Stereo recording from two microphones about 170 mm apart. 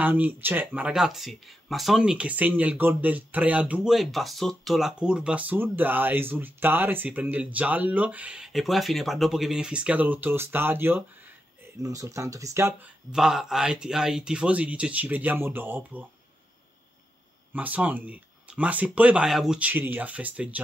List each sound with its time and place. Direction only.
0.0 s speech: 10° right (ahead or behind)
13.1 s speech: centre (ahead or behind)
17.5 s speech: 10° right (ahead or behind)